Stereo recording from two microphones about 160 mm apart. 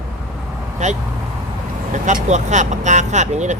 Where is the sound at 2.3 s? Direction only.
50° right (ahead or behind).